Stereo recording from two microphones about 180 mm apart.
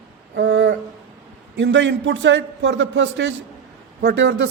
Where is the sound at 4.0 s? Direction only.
65° right (ahead or behind).